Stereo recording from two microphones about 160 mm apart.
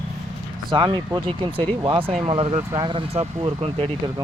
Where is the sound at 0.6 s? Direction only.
30° right (ahead or behind).